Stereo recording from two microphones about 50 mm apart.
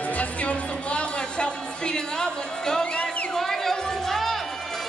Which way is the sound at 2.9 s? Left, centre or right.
Left.